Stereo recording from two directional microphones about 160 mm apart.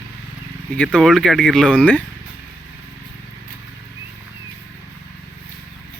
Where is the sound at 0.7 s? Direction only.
5° left (ahead or behind).